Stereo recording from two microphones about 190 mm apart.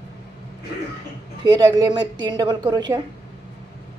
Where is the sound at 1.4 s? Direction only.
20° right (ahead or behind).